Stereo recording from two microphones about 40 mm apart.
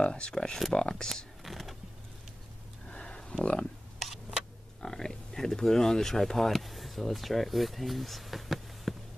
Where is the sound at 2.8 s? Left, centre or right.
Centre.